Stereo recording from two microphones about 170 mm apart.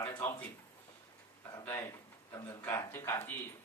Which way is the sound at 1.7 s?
15° left (ahead or behind).